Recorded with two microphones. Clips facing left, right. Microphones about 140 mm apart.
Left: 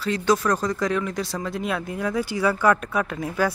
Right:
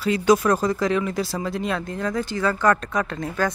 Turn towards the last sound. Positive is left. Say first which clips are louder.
# even
turn(degrees=10)  # may be behind; listen again after turning